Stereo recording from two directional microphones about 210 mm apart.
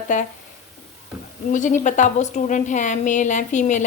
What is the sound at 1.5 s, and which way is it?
Speech, 35° left (ahead or behind).